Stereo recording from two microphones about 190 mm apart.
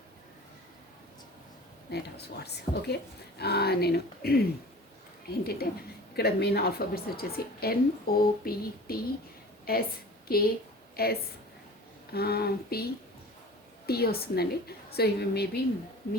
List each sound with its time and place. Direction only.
1.9 s a woman's voice: 60° left (ahead or behind)